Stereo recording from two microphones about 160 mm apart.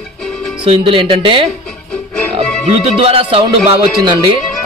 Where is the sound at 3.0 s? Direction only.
35° right (ahead or behind).